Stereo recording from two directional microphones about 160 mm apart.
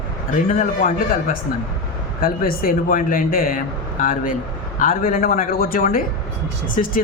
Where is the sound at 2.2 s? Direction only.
65° left (ahead or behind).